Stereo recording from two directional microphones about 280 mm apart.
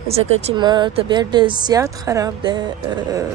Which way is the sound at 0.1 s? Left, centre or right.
Centre.